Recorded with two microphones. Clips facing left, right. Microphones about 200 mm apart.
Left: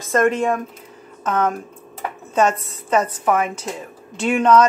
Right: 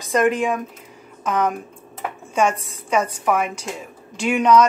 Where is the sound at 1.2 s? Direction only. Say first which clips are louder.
Left 1 dB; 10° right (ahead or behind).